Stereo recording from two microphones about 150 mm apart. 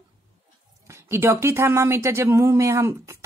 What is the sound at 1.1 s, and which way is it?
Speech, 15° right (ahead or behind).